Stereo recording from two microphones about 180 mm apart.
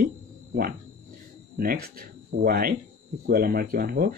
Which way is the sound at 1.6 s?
55° right (ahead or behind).